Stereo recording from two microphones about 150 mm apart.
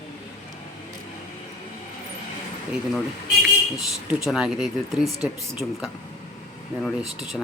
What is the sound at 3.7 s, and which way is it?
Speech, 5° right (ahead or behind).